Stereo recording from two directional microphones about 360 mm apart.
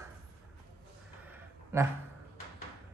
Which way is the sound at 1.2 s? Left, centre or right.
Centre.